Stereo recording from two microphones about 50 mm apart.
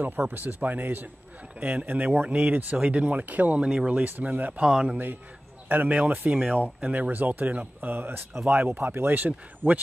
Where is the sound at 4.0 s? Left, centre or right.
Right.